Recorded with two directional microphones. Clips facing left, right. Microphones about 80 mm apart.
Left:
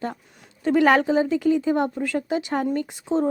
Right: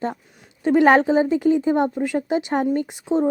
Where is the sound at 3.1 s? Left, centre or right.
Centre.